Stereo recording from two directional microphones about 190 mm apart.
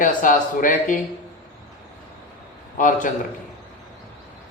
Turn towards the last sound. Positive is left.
turn(degrees=45)  # may be behind; listen again after turning